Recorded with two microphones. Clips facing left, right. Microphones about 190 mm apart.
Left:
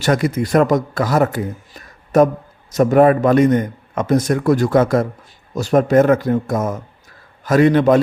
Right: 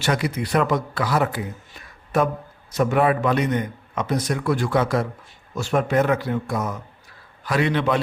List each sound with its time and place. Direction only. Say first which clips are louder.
0.0 s speech: left 6 dB; 45° left (ahead or behind)